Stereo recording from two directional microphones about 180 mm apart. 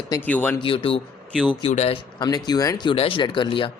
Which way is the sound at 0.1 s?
10° left (ahead or behind).